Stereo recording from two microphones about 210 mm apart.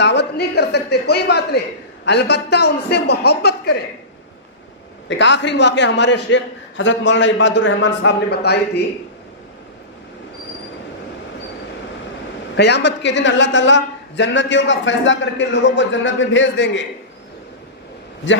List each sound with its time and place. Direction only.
0.0 s a man's voice: 55° left (ahead or behind)
5.0 s a woman's voice: 60° left (ahead or behind)
12.5 s a woman's voice: 55° left (ahead or behind)